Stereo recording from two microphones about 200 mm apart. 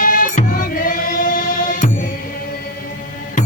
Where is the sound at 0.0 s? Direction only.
45° left (ahead or behind).